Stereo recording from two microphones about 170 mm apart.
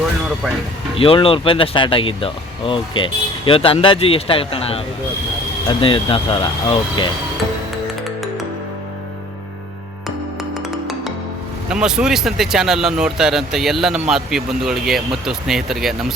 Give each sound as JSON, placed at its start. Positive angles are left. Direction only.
{"t": 0.9, "sound": "speech", "side_deg": 35}
{"t": 11.7, "sound": "speech", "side_deg": -5}